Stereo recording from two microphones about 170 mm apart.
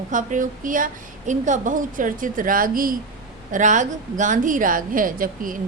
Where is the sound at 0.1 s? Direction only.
50° right (ahead or behind).